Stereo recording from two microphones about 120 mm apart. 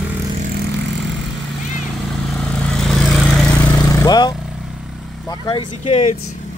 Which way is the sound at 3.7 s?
30° left (ahead or behind).